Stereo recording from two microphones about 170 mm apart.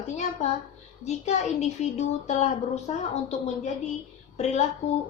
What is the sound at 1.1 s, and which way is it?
A woman's voice, 40° left (ahead or behind).